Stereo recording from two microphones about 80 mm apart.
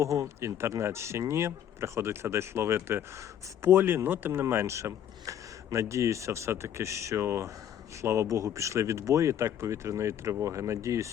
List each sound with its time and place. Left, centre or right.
0.0 s speech: right